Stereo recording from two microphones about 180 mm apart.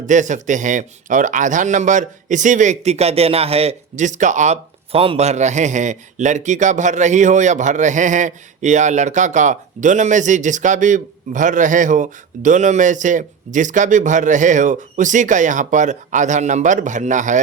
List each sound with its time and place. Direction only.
0.0 s speech: 45° right (ahead or behind)